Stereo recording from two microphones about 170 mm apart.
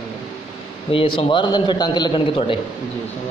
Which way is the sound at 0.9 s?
30° left (ahead or behind).